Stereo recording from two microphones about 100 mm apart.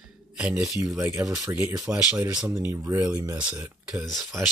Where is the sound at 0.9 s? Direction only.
30° right (ahead or behind).